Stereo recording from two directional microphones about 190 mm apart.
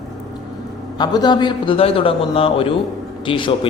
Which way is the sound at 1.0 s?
20° left (ahead or behind).